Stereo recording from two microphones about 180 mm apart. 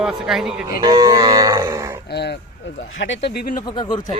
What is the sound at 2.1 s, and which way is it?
Speech, 65° left (ahead or behind).